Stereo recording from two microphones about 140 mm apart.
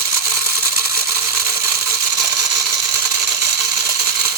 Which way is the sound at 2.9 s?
15° right (ahead or behind).